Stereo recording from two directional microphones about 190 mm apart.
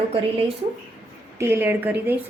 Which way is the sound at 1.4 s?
10° right (ahead or behind).